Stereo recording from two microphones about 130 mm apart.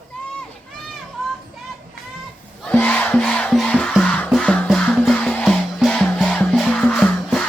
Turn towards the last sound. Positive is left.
turn(degrees=10)  # may be behind; listen again after turning